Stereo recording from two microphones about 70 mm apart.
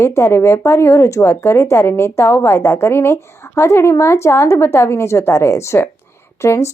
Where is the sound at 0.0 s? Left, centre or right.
Left.